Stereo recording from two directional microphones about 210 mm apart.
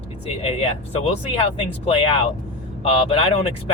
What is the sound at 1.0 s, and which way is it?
Speech, 25° left (ahead or behind).